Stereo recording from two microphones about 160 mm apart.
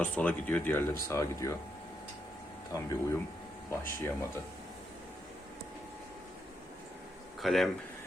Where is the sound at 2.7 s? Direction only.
20° left (ahead or behind).